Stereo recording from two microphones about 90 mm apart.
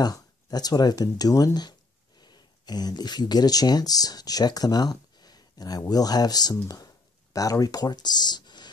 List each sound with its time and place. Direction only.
0.0 s speech: 45° left (ahead or behind)